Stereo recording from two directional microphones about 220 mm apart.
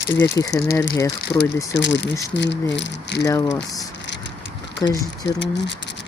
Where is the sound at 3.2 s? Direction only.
15° left (ahead or behind).